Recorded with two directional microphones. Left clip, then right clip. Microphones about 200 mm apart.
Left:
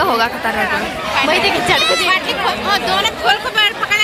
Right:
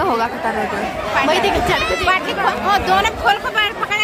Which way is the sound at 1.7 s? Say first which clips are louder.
Left 3 dB; 50° right (ahead or behind).